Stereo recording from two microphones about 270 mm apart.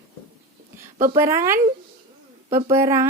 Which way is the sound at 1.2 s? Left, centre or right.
Centre.